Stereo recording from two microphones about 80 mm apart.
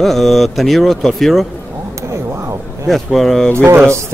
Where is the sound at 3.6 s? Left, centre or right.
Right.